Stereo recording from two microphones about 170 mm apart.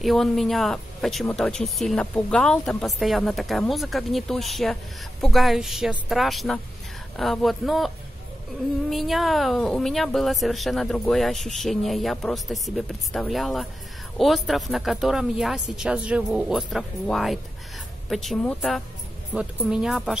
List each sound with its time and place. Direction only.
0.0 s speech: centre (ahead or behind)
8.9 s speech: centre (ahead or behind)